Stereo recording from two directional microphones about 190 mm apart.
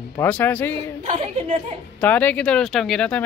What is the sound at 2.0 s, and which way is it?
Speech, 10° left (ahead or behind).